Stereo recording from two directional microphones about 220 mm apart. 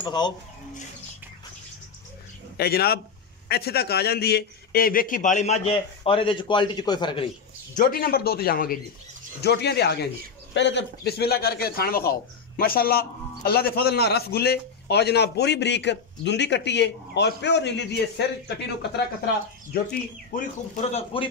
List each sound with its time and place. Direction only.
0.0 s speech: 20° left (ahead or behind)
2.5 s a man's voice: 45° left (ahead or behind); by 7.2 s 20° left (ahead or behind)
7.7 s a man's voice: 40° left (ahead or behind)
20.9 s a man's voice: 25° left (ahead or behind)